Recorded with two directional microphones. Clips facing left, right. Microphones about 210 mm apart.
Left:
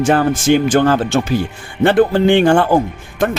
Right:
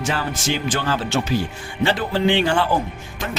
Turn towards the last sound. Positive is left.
turn(degrees=55)  # may be behind; listen again after turning